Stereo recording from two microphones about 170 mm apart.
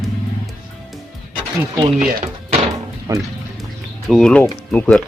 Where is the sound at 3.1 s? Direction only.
20° right (ahead or behind).